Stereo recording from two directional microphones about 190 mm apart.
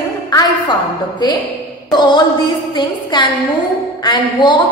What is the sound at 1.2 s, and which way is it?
A woman's voice, 20° left (ahead or behind).